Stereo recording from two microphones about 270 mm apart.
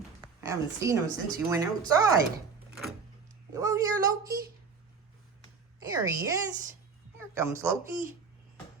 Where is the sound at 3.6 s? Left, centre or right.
Centre.